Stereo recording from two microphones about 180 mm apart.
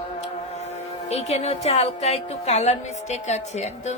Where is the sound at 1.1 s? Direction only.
35° left (ahead or behind).